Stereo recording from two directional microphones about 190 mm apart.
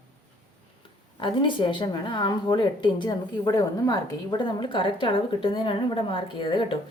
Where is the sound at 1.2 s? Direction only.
25° left (ahead or behind).